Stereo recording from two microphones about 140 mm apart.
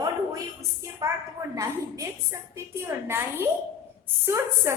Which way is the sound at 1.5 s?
25° right (ahead or behind).